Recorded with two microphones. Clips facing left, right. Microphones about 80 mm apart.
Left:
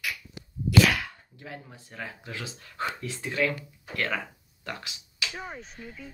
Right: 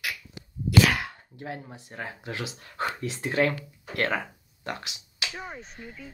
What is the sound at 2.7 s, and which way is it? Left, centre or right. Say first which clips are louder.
Speech: right 2 dB; right.